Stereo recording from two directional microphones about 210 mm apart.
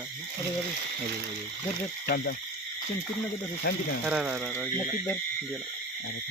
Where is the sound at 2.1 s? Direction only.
50° left (ahead or behind).